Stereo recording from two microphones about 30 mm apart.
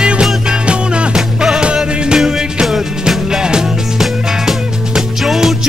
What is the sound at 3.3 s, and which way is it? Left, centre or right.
Music, right.